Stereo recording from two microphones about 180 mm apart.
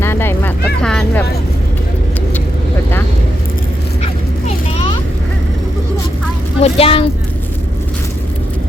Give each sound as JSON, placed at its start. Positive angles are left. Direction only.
{"t": 0.0, "sound": "vehicle", "side_deg": 15}
{"t": 4.0, "sound": "bow-wow", "side_deg": 30}
{"t": 6.6, "sound": "vehicle", "side_deg": 30}